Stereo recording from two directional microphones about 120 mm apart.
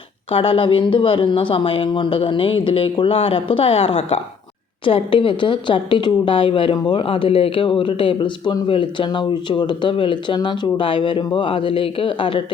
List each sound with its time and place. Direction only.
0.3 s speech: 50° left (ahead or behind)